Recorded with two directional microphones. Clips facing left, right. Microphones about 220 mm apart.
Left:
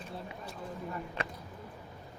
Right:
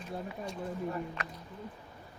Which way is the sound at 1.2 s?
30° left (ahead or behind).